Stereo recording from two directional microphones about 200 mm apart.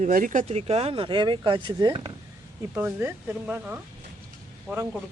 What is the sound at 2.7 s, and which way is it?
Speech, 10° right (ahead or behind).